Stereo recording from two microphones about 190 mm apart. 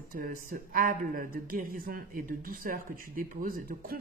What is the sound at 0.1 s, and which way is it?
A man's voice, 50° right (ahead or behind).